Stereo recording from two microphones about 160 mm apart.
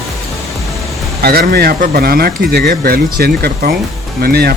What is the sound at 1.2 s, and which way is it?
Speech, 75° right (ahead or behind).